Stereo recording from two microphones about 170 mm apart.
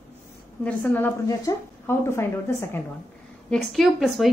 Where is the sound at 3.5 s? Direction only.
Centre (ahead or behind).